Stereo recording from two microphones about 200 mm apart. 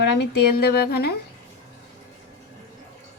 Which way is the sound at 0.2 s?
55° left (ahead or behind).